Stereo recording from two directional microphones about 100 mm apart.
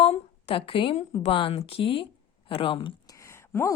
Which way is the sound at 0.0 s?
80° left.